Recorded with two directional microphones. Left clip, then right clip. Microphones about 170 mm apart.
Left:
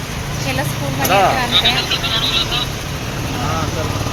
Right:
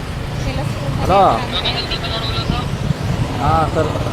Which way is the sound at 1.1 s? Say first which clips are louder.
Even; 40° right (ahead or behind).